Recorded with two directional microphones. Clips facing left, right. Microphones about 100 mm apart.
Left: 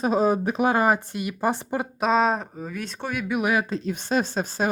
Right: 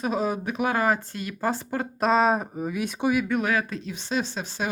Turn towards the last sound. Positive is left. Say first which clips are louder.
# left 4 dB
turn(degrees=45)  # may be behind; listen again after turning